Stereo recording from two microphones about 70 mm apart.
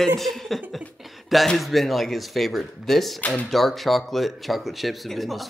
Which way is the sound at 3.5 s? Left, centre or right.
Centre.